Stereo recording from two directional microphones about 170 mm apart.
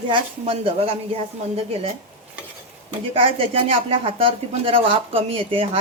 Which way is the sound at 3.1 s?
35° right (ahead or behind).